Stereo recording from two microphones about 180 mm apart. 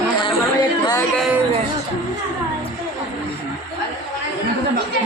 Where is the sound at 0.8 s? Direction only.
20° left (ahead or behind).